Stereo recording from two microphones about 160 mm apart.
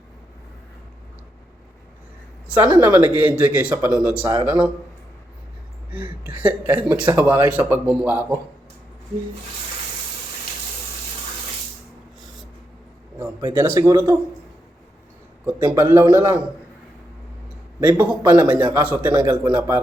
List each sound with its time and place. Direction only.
2.7 s speech: 15° right (ahead or behind)
6.2 s speech: 10° right (ahead or behind)
13.5 s speech: 15° right (ahead or behind)
15.6 s speech: 20° right (ahead or behind)
17.7 s speech: 10° right (ahead or behind)
19.1 s speech: 20° right (ahead or behind)